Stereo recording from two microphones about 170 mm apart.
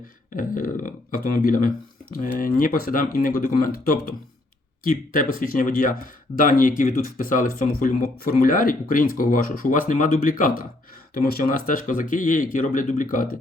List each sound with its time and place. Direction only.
0.3 s speech: 50° left (ahead or behind)